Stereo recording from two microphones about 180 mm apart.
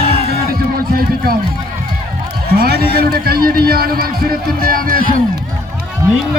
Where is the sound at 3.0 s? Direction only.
60° right (ahead or behind).